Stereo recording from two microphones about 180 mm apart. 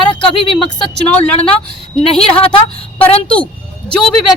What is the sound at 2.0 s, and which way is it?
Speech, 30° left (ahead or behind).